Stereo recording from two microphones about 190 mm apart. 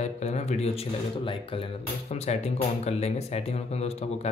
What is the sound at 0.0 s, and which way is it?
Speech, 35° left (ahead or behind).